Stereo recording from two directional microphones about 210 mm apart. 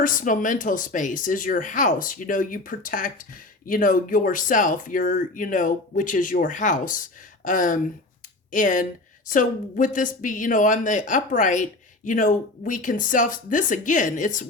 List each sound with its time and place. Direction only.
0.0 s a woman's voice: 40° left (ahead or behind)